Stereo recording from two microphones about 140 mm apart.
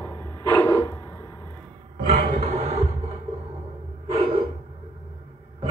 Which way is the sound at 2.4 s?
50° right (ahead or behind).